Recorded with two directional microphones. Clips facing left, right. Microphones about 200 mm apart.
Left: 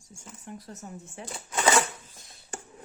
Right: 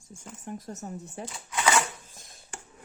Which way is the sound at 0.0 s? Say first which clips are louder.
Right 4 dB; 50° right (ahead or behind).